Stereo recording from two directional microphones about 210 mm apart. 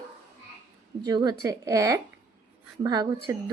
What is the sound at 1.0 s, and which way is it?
A woman's voice, 20° right (ahead or behind).